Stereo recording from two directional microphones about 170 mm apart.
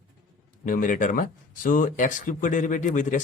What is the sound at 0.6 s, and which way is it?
Speech, 50° left (ahead or behind).